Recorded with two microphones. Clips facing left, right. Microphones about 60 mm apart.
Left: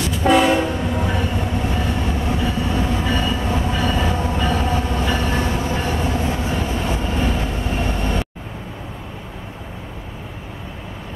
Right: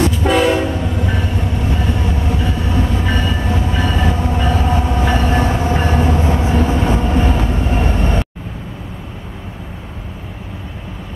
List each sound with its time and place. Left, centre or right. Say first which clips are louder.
0.1 s train: right 1 dB; centre
5.0 s train: right 5 dB; right
7.7 s vehicle: right 2 dB; right